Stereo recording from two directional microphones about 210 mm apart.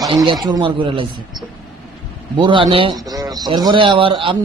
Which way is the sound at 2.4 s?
25° right (ahead or behind).